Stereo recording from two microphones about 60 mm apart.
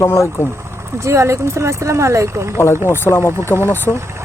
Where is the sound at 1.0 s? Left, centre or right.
Right.